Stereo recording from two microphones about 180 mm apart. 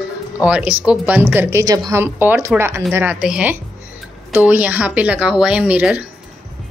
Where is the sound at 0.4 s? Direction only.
5° right (ahead or behind).